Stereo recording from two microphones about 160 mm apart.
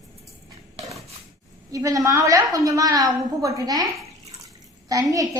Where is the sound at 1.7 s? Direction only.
20° right (ahead or behind).